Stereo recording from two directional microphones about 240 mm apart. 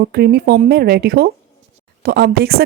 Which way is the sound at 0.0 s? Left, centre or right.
Right.